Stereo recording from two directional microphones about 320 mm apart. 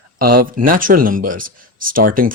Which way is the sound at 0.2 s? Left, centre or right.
Right.